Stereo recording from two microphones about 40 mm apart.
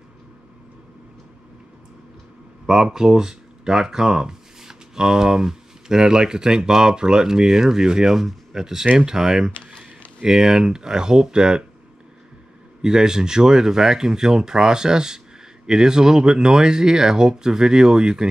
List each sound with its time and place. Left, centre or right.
2.6 s speech: centre
12.8 s speech: centre